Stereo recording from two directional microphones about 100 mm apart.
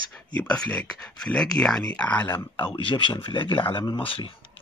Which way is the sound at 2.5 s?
55° left (ahead or behind).